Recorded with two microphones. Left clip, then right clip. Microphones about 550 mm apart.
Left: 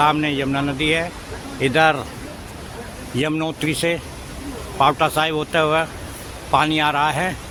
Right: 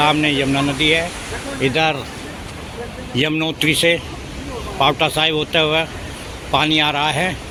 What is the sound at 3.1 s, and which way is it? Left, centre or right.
Speech, left.